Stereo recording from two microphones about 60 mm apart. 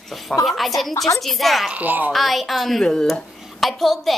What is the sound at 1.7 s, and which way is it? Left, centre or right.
Speech, right.